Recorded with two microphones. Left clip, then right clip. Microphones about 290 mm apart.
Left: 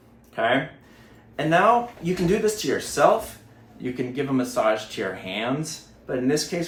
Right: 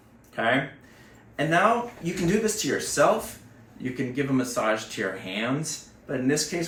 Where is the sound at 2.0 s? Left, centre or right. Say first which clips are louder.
Left 3 dB; centre.